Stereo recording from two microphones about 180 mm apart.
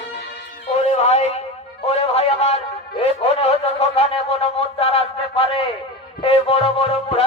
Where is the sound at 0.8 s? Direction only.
35° left (ahead or behind).